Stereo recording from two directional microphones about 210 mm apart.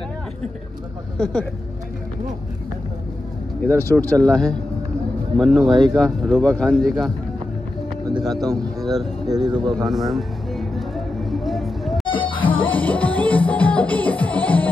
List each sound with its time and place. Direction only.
1.1 s speech: 5° left (ahead or behind)
3.6 s speech: 10° left (ahead or behind)
8.1 s speech: 20° right (ahead or behind)
9.8 s music: centre (ahead or behind)
12.1 s music: 25° left (ahead or behind)
12.6 s music: 5° left (ahead or behind)